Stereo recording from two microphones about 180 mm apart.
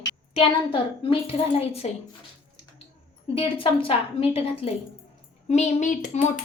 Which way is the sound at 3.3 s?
30° left (ahead or behind).